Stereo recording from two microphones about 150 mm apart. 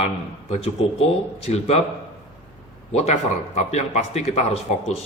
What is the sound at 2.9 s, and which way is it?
Speech, 45° left (ahead or behind).